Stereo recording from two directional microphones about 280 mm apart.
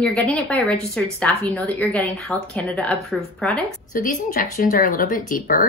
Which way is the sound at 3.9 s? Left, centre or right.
Left.